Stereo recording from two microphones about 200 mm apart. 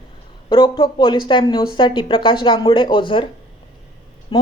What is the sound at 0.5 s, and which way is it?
Speech, 20° left (ahead or behind).